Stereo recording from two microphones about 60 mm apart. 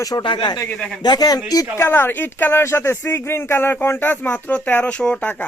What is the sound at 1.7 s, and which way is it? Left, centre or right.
Speech, left.